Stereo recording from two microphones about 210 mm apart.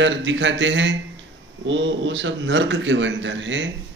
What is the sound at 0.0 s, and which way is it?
A man's voice, 60° right (ahead or behind).